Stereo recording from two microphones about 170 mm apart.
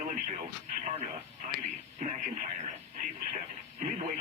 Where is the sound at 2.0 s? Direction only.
50° right (ahead or behind).